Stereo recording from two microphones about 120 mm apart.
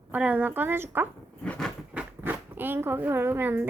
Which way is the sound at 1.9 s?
15° right (ahead or behind).